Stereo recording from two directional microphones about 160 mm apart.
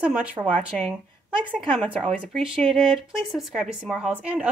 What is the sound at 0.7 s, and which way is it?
A woman's voice, 5° left (ahead or behind).